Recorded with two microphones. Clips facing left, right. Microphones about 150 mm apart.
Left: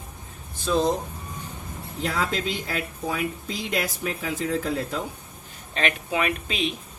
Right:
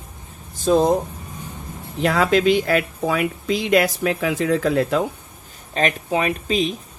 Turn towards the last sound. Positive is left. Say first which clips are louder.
# right 6 dB
turn(degrees=-40)  # may be behind; listen again after turning